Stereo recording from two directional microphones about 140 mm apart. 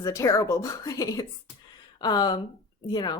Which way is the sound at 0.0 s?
25° left (ahead or behind).